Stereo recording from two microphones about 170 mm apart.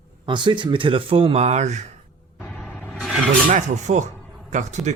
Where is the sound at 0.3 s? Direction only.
25° right (ahead or behind); by 1.9 s 40° right (ahead or behind).